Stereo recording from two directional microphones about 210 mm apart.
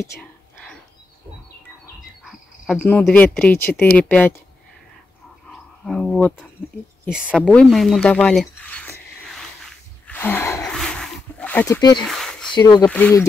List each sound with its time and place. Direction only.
0.0 s whispering: 10° left (ahead or behind)
2.6 s speech: centre (ahead or behind)
5.5 s a sound: centre (ahead or behind)
7.1 s speech: centre (ahead or behind)
10.0 s a sound: 10° left (ahead or behind)
11.8 s speech: 20° left (ahead or behind)
12.1 s a sound: centre (ahead or behind)
12.5 s speech: 20° left (ahead or behind)
12.8 s speech: 5° left (ahead or behind)